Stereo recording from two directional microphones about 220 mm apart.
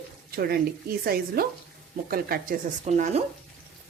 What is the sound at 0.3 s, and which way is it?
Speech, 45° right (ahead or behind).